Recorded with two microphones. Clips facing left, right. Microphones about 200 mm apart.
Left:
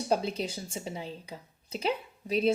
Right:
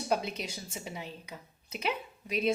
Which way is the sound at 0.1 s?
30° left (ahead or behind).